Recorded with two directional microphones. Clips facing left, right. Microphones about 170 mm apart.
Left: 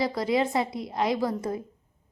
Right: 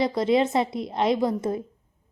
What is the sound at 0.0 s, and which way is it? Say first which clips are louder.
A woman's voice: right 4 dB; 20° right (ahead or behind).